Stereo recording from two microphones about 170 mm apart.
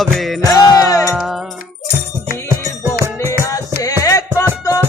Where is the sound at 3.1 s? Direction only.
15° left (ahead or behind).